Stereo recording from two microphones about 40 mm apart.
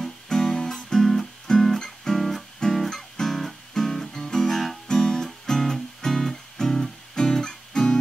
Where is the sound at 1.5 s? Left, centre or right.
Centre.